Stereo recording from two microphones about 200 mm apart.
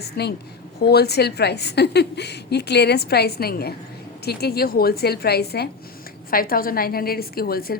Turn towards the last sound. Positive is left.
turn(degrees=50)  # may be behind; listen again after turning